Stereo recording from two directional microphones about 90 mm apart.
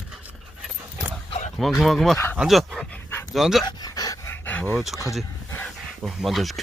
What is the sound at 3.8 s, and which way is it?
Dog, 45° left (ahead or behind).